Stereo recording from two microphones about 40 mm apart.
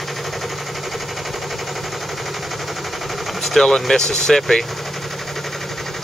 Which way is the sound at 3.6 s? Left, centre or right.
Centre.